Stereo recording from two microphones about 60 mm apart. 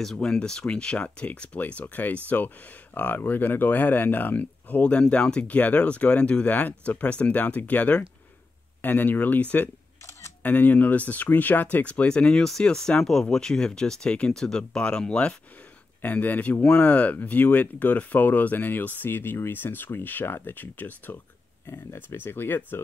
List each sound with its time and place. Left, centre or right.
0.0 s speech: centre
16.0 s speech: left
21.6 s speech: left